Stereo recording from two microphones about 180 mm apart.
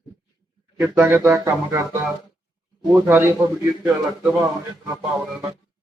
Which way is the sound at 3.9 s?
10° right (ahead or behind).